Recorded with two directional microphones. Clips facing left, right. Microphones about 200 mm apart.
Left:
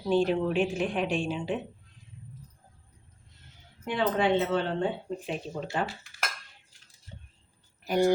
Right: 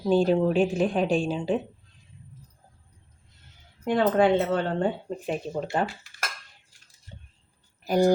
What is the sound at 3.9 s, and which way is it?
Speech, 45° right (ahead or behind).